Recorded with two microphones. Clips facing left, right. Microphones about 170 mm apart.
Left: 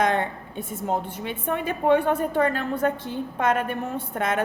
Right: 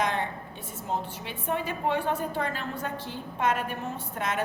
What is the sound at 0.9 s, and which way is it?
A woman's voice, 55° left (ahead or behind).